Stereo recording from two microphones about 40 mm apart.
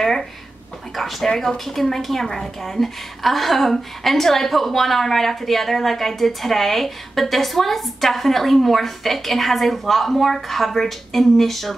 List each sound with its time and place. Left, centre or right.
0.9 s speech: centre
1.3 s speech: centre
1.7 s a woman's voice: centre